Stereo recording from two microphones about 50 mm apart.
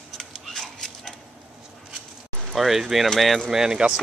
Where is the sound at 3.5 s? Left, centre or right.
Centre.